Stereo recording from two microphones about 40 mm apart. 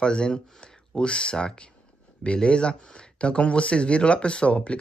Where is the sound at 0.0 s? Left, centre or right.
Left.